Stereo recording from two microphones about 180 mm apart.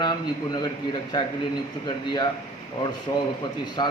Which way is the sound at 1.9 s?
25° left (ahead or behind).